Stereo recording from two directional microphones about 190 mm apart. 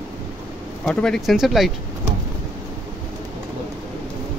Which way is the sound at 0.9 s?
5° left (ahead or behind).